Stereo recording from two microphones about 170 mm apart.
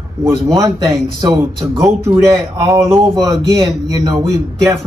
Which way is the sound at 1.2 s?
20° right (ahead or behind).